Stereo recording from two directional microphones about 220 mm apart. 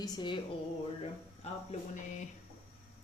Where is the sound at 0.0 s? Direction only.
20° left (ahead or behind).